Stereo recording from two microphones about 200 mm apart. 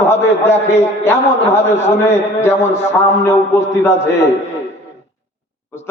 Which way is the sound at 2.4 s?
10° left (ahead or behind).